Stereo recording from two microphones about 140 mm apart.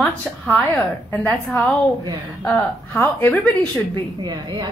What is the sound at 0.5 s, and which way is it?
A woman's voice, 15° left (ahead or behind).